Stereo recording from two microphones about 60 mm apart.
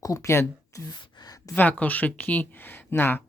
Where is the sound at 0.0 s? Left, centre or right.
Left.